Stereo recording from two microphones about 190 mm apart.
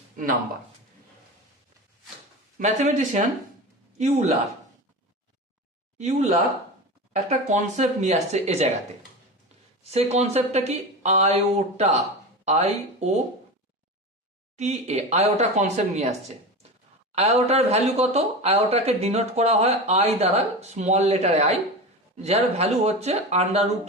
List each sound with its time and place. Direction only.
2.6 s a man's voice: 35° right (ahead or behind)
6.0 s speech: 35° right (ahead or behind)
9.8 s speech: 35° right (ahead or behind)
14.6 s speech: 35° right (ahead or behind)
17.2 s speech: 35° right (ahead or behind)